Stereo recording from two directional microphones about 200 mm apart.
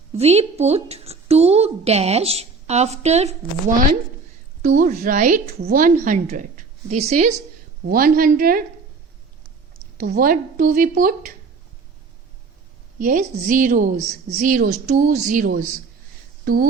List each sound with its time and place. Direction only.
0.1 s a woman's voice: 30° right (ahead or behind)
7.9 s a woman's voice: 45° right (ahead or behind)
10.1 s a woman's voice: 45° right (ahead or behind)
13.0 s a woman's voice: 40° right (ahead or behind)